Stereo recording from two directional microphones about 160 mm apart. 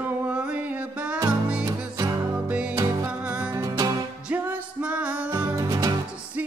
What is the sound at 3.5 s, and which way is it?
Music, 20° right (ahead or behind).